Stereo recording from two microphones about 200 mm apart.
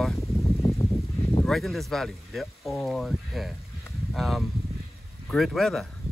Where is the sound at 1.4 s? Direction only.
Centre (ahead or behind).